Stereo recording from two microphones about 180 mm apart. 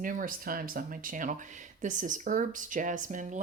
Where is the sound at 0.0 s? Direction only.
50° right (ahead or behind).